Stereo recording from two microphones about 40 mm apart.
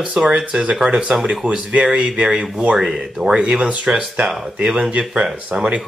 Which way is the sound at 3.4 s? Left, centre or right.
Right.